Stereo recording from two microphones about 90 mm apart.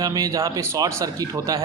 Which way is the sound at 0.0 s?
45° right (ahead or behind).